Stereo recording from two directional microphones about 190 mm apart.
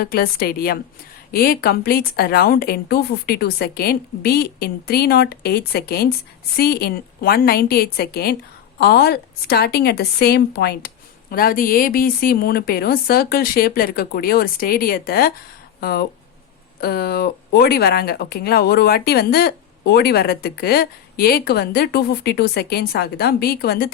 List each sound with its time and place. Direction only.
0.0 s a woman's voice: 55° left (ahead or behind)